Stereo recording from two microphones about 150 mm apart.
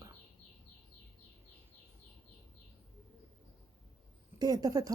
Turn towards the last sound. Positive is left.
turn(degrees=-25)  # may be behind; listen again after turning